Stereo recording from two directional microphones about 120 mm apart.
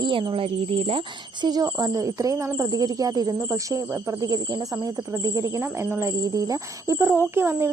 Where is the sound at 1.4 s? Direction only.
35° right (ahead or behind).